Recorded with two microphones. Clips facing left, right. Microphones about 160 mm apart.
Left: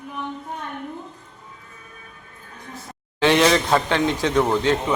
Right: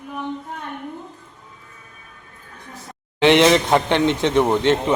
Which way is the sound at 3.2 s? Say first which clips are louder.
Right 3 dB; 20° right (ahead or behind).